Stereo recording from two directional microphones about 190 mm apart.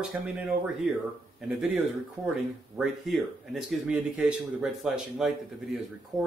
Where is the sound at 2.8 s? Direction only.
Centre (ahead or behind).